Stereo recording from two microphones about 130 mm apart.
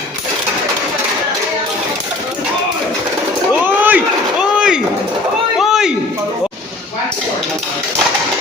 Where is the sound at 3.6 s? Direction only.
15° right (ahead or behind).